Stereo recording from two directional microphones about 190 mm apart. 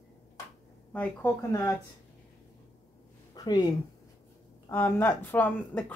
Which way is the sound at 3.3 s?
20° left (ahead or behind).